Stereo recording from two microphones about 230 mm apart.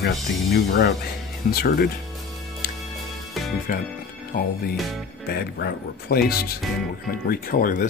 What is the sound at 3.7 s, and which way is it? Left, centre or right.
Speech, left.